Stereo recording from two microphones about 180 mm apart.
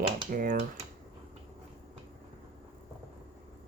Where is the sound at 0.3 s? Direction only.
50° right (ahead or behind).